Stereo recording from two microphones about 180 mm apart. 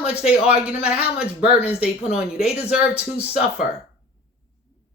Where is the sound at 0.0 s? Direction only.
35° left (ahead or behind).